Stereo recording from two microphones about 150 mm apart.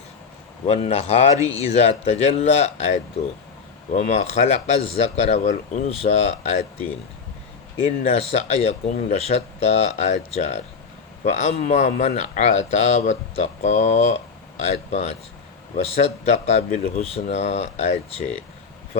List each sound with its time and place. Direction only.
0.7 s speech: 45° left (ahead or behind)
7.8 s speech: 45° left (ahead or behind)